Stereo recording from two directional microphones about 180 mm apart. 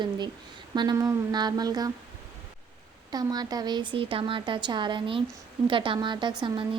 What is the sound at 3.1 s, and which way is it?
Speech, 20° right (ahead or behind).